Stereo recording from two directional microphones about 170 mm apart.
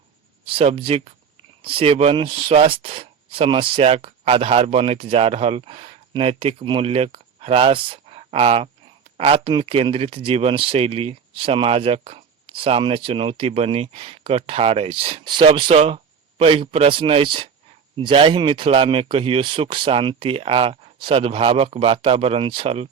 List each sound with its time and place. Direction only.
0.4 s speech: 35° right (ahead or behind)